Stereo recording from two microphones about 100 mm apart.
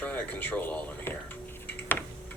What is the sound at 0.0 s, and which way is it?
Tick-tock, 15° left (ahead or behind).